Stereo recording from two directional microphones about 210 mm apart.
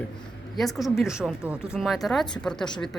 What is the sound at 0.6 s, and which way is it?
Speech, centre (ahead or behind).